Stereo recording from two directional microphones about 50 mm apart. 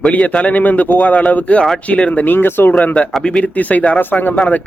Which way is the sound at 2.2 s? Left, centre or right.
Left.